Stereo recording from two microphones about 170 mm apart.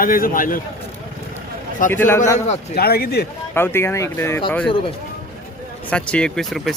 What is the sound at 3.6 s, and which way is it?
Speech, 15° left (ahead or behind).